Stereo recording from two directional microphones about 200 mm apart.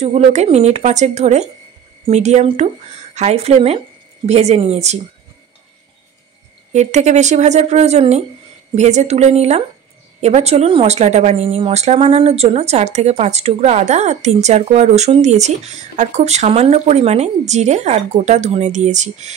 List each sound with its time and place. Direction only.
0.0 s a woman's voice: 35° right (ahead or behind)
6.7 s a woman's voice: 35° right (ahead or behind)